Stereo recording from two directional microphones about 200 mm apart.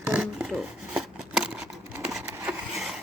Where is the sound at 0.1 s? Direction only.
5° right (ahead or behind).